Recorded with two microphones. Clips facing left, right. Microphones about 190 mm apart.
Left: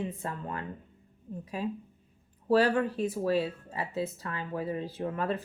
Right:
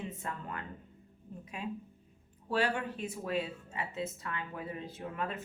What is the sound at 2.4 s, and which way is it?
Speech, 35° left (ahead or behind).